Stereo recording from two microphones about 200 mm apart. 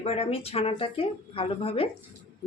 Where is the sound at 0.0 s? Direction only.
30° left (ahead or behind).